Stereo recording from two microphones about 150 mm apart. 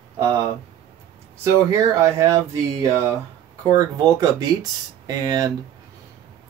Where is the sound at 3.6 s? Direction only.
25° right (ahead or behind).